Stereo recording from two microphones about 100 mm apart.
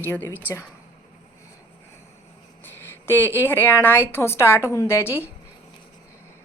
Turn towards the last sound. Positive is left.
turn(degrees=25)  # may be behind; listen again after turning